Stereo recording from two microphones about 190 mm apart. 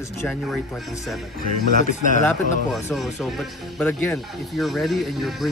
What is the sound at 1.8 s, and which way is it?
Speech, 40° left (ahead or behind).